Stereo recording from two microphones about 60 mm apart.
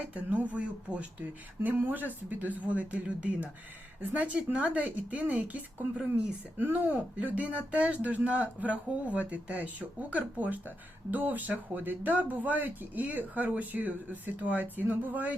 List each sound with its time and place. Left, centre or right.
0.1 s speech: right
1.6 s speech: right